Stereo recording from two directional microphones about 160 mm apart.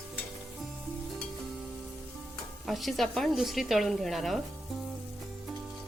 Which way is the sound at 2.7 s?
Centre (ahead or behind).